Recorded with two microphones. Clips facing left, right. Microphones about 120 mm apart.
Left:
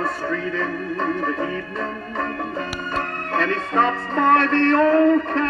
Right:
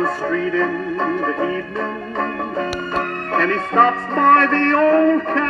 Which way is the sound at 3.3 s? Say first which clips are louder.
Right 3 dB; 40° right (ahead or behind).